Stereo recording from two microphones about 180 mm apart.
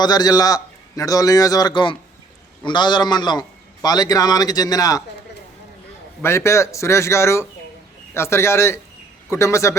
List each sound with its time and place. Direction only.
0.0 s a man's voice: 20° left (ahead or behind)
6.2 s a man's voice: 15° left (ahead or behind)